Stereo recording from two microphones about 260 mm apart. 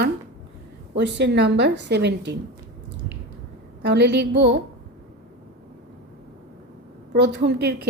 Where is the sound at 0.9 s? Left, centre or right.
Right.